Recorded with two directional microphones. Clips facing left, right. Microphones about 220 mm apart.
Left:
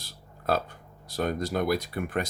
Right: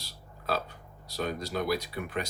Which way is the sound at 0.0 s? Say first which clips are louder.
Left 6 dB; 50° left (ahead or behind).